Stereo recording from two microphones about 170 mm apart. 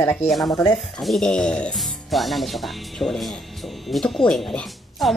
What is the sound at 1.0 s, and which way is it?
Speech, centre (ahead or behind).